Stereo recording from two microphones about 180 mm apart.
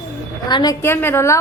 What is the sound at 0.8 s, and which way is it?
Speech, 10° left (ahead or behind).